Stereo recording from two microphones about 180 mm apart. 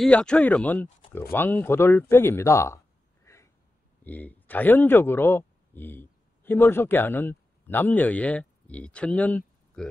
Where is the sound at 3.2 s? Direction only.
15° left (ahead or behind).